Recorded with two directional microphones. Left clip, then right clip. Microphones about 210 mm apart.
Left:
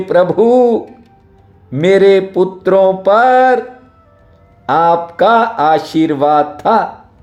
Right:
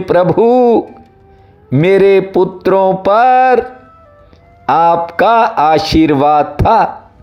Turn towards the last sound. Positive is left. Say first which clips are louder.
# right 2 dB
turn(degrees=-25)  # may be behind; listen again after turning